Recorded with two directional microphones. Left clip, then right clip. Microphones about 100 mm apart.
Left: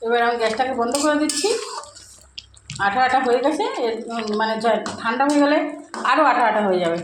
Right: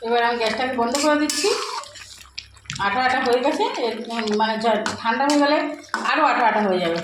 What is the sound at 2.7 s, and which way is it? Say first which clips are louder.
A woman's voice: left 2 dB; 20° left (ahead or behind).